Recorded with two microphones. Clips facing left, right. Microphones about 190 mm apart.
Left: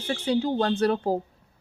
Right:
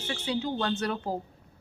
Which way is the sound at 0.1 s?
45° left (ahead or behind).